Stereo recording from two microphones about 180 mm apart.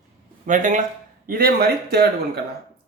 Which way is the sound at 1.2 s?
55° right (ahead or behind).